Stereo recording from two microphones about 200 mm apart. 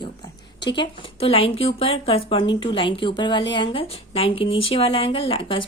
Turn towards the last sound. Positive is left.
turn(degrees=25)  # may be behind; listen again after turning